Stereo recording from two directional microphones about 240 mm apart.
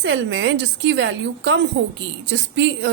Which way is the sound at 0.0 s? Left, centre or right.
Right.